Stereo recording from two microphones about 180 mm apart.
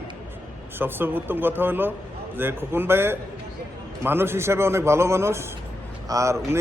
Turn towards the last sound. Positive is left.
turn(degrees=-15)  # may be behind; listen again after turning